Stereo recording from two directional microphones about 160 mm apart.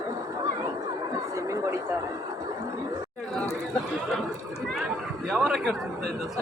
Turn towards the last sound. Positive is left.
turn(degrees=0)  # may be behind; listen again after turning